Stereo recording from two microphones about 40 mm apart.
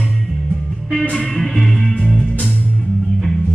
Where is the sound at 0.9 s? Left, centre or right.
Centre.